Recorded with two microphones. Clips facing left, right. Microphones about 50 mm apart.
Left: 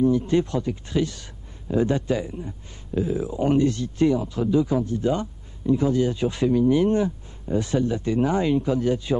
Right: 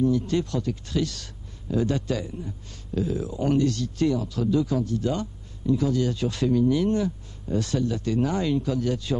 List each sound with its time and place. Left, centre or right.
0.0 s speech: left